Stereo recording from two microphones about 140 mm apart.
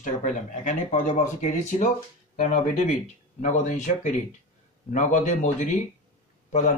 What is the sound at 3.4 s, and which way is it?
Speech, 60° left (ahead or behind).